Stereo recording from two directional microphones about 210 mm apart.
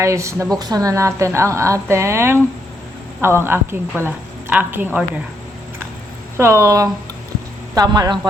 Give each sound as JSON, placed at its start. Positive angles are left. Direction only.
{"t": 0.0, "sound": "a woman's voice", "side_deg": -15}
{"t": 6.3, "sound": "a woman's voice", "side_deg": -10}